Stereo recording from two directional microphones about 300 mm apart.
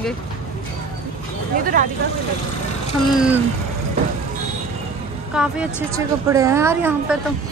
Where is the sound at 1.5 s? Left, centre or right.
Right.